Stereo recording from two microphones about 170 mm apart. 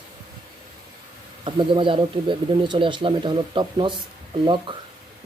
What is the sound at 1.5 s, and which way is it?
A man's voice, 30° right (ahead or behind).